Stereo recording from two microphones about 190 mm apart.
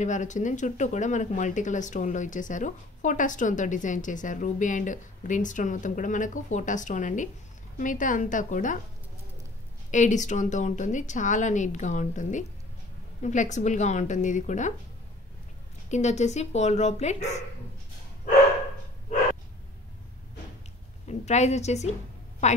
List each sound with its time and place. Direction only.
0.0 s a woman's voice: 40° left (ahead or behind)
9.8 s speech: 40° left (ahead or behind)
15.9 s speech: 35° left (ahead or behind)
21.1 s speech: 35° left (ahead or behind)